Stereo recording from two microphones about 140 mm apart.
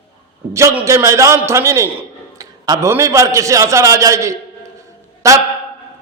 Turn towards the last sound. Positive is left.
turn(degrees=-25)  # may be behind; listen again after turning